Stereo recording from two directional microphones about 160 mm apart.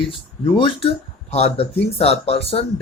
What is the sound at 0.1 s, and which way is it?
Speech, 35° left (ahead or behind).